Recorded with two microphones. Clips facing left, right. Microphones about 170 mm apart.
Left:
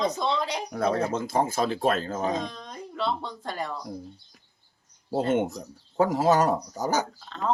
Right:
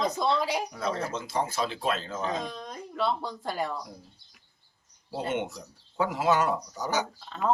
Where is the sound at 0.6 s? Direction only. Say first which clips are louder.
Left 6 dB; 55° left (ahead or behind).